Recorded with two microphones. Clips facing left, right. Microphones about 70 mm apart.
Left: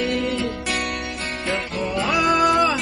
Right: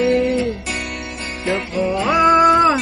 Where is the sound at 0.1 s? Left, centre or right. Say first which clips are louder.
Right 7 dB; right.